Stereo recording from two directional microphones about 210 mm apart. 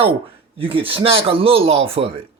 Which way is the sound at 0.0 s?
25° right (ahead or behind).